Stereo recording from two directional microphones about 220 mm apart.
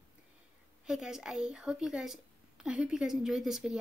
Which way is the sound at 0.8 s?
Centre (ahead or behind).